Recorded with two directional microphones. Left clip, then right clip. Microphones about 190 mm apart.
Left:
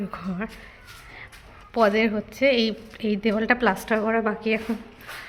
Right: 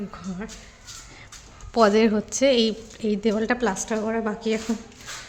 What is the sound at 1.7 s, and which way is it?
A woman's voice, 30° right (ahead or behind).